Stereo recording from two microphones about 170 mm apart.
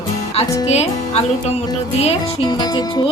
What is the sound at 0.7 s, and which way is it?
Music, 40° left (ahead or behind).